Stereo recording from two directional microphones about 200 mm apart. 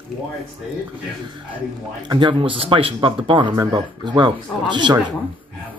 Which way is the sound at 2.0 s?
25° right (ahead or behind).